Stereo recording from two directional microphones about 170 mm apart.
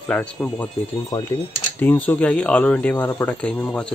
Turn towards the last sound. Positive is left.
turn(degrees=5)  # may be behind; listen again after turning